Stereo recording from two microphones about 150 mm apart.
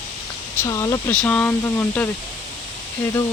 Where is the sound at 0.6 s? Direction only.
20° left (ahead or behind).